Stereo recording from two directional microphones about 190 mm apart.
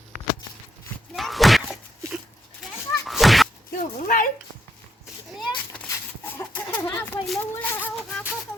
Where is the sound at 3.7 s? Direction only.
45° left (ahead or behind).